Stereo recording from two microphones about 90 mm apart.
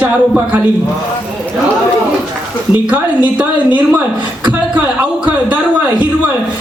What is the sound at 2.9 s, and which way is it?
A woman's voice, 15° right (ahead or behind).